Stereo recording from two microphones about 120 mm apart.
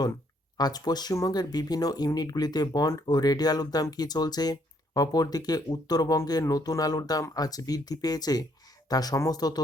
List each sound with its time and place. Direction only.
0.5 s speech: 35° left (ahead or behind)